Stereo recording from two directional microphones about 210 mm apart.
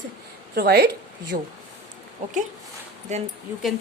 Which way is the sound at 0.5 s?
50° right (ahead or behind).